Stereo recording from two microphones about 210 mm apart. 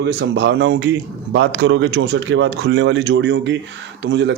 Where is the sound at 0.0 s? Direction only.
55° right (ahead or behind).